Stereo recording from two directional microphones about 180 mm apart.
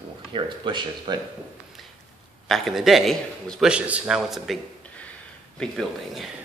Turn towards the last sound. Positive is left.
turn(degrees=0)  # may be behind; listen again after turning